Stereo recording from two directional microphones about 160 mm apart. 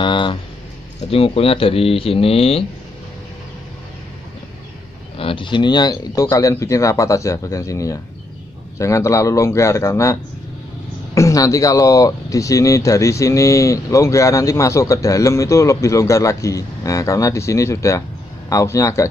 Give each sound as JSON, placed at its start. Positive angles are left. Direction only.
{"t": 0.0, "sound": "a sound", "side_deg": 30}
{"t": 1.1, "sound": "speech", "side_deg": 35}
{"t": 5.1, "sound": "speech", "side_deg": 35}
{"t": 11.1, "sound": "speech", "side_deg": 20}